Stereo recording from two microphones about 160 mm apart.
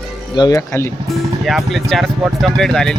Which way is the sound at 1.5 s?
Centre (ahead or behind).